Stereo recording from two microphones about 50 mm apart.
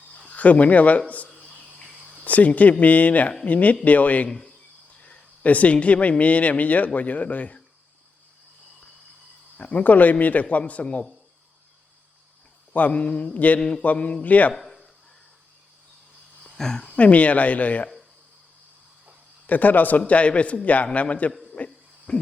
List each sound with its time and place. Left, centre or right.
0.3 s a man's voice: left
9.6 s speech: left
12.7 s speech: left
14.5 s a sound: centre
16.6 s speech: centre
16.9 s speech: left
19.5 s a man's voice: left
20.1 s speech: left
21.5 s cricket: left